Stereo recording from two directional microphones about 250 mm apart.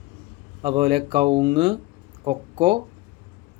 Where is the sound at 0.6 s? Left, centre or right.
Centre.